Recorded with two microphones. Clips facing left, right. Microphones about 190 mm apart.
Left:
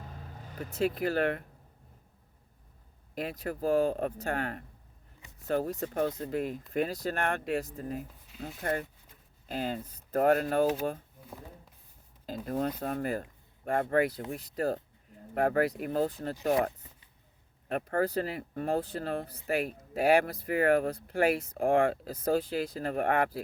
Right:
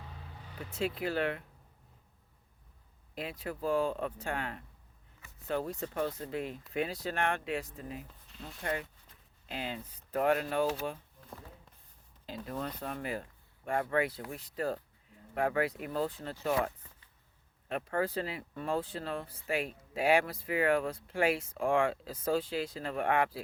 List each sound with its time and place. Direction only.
0.0 s speech: 45° left (ahead or behind)
3.2 s speech: 45° left (ahead or behind)
12.5 s speech: 45° left (ahead or behind)
17.7 s speech: 45° left (ahead or behind)